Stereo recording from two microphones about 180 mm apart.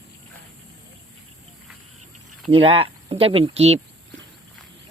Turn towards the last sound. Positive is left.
turn(degrees=-35)  # may be behind; listen again after turning